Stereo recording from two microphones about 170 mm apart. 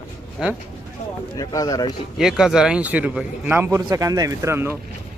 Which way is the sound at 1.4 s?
20° left (ahead or behind).